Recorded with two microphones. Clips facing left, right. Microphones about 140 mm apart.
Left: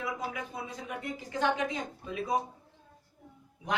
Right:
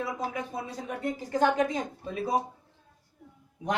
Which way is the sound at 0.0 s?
35° right (ahead or behind).